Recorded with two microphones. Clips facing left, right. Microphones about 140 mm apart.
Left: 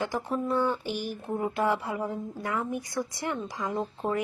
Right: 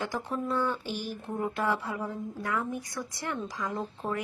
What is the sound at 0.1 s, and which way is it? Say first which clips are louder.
Speech: left 3 dB; 15° left (ahead or behind).